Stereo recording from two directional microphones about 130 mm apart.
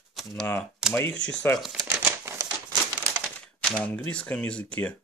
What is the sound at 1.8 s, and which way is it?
Typewriter, 20° right (ahead or behind).